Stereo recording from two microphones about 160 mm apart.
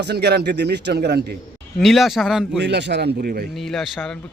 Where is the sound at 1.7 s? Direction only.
Centre (ahead or behind).